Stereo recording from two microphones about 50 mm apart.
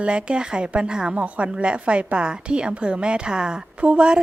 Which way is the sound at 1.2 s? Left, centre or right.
Right.